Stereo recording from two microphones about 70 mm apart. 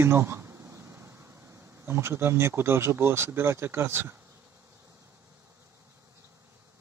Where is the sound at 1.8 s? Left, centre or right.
Right.